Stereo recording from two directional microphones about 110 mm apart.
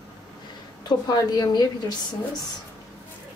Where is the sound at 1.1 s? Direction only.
40° left (ahead or behind).